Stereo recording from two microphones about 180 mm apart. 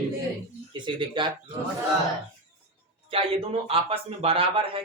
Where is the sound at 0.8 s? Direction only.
25° right (ahead or behind).